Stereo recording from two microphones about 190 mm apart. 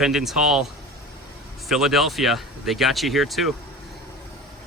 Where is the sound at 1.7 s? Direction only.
Centre (ahead or behind).